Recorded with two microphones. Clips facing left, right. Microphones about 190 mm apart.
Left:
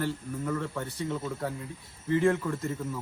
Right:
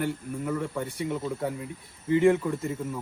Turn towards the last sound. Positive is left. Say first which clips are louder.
# right 2 dB
turn(degrees=-15)  # may be behind; listen again after turning